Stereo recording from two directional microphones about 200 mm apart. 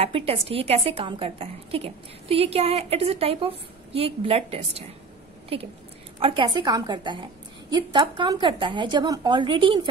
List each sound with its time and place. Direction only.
0.0 s a woman's voice: 30° right (ahead or behind)
6.1 s a woman's voice: 25° right (ahead or behind)